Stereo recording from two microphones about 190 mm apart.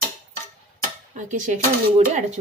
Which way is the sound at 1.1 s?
40° right (ahead or behind).